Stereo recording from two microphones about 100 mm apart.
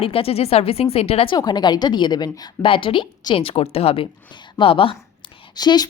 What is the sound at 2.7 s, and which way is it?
Speech, 60° left (ahead or behind).